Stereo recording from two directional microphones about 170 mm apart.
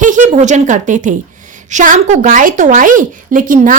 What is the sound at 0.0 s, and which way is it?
A woman's voice, 50° right (ahead or behind).